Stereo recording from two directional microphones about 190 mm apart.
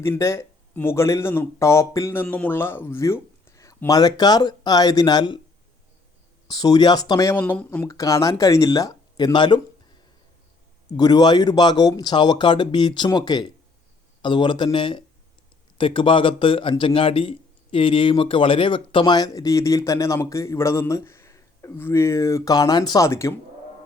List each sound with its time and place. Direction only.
0.0 s speech: 15° left (ahead or behind)
6.5 s a man's voice: 20° left (ahead or behind)
10.9 s a man's voice: 20° left (ahead or behind)